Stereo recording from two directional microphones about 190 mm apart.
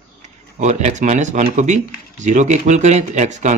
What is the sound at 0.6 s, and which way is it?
Speech, 40° right (ahead or behind).